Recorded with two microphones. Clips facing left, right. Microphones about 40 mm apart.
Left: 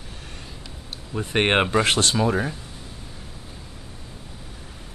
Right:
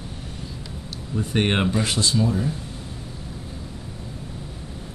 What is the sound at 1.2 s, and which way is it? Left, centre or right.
Speech, left.